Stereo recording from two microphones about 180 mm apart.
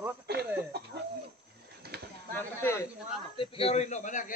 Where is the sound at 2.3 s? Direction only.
15° left (ahead or behind).